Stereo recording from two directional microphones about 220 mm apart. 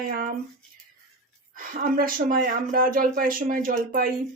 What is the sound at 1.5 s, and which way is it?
Speech, 40° right (ahead or behind).